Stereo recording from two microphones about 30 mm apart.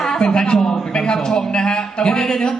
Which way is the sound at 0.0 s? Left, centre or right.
Left.